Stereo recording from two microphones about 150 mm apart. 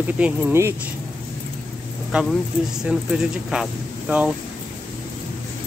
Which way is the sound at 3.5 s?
5° right (ahead or behind).